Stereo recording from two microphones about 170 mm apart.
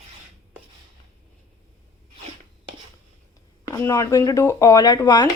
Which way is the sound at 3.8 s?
15° left (ahead or behind).